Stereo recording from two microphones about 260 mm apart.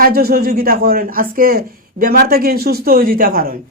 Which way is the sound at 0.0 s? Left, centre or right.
Right.